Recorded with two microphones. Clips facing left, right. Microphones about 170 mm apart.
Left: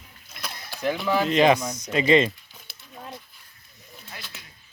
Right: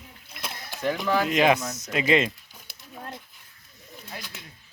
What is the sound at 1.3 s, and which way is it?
A man's voice, 5° right (ahead or behind).